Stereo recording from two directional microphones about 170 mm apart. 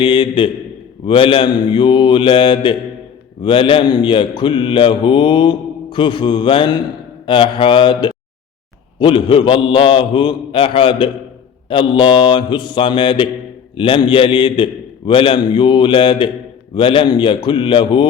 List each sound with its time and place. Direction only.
0.0 s mantra: 30° left (ahead or behind)
9.0 s a man's voice: 30° left (ahead or behind)
11.7 s mantra: 30° left (ahead or behind)